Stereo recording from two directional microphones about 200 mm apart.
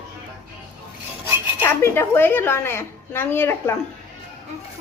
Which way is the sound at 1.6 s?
10° left (ahead or behind).